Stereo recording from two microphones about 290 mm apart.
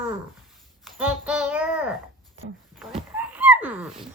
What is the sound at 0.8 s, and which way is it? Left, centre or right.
A child's voice, centre.